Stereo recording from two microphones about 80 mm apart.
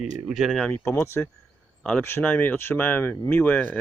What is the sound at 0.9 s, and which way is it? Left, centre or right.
Speech, left.